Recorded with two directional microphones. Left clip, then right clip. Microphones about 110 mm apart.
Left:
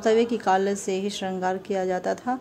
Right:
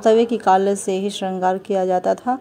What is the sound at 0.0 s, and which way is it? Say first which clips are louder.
A woman's voice: right 6 dB; 45° right (ahead or behind).